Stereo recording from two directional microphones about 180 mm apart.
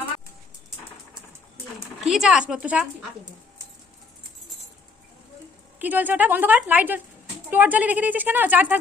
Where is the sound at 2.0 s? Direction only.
Centre (ahead or behind).